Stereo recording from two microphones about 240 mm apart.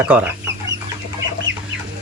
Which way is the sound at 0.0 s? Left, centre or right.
Centre.